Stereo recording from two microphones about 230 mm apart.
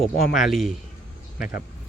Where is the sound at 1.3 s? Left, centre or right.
Left.